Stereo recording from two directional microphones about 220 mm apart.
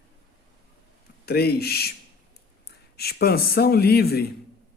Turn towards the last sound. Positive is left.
turn(degrees=45)  # may be behind; listen again after turning